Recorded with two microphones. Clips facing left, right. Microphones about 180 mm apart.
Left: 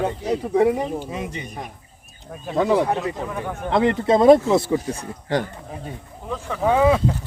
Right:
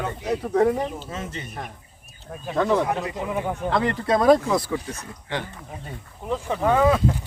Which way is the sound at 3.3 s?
15° right (ahead or behind).